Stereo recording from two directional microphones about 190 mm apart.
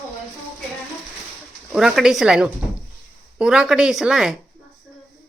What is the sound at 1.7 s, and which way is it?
Speech, 5° right (ahead or behind).